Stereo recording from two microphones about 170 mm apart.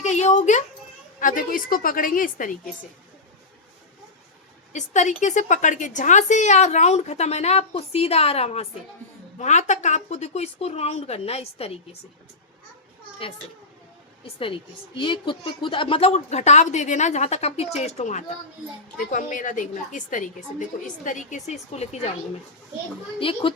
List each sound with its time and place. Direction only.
0.0 s a woman's voice: 40° left (ahead or behind)
4.7 s a woman's voice: 45° left (ahead or behind)
14.3 s a woman's voice: 30° left (ahead or behind)
23.2 s a woman's voice: 30° left (ahead or behind)